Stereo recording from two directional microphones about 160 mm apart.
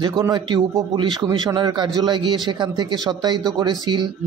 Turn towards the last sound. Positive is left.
turn(degrees=-25)  # may be behind; listen again after turning